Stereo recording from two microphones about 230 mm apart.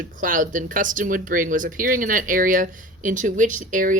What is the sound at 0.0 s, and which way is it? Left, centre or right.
Speech, right.